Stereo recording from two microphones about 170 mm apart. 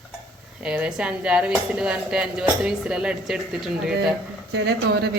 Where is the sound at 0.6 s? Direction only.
5° right (ahead or behind).